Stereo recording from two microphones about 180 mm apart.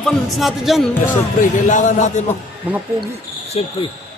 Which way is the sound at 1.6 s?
45° left (ahead or behind).